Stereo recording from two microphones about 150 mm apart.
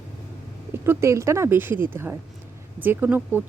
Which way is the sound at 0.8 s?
20° right (ahead or behind).